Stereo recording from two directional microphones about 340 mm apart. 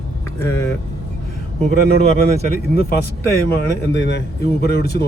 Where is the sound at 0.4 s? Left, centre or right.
Centre.